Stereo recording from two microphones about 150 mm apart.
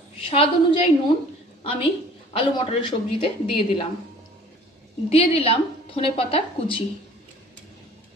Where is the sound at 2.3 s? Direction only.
35° left (ahead or behind).